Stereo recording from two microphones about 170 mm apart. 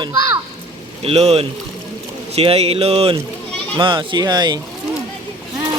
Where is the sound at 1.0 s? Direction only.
35° right (ahead or behind).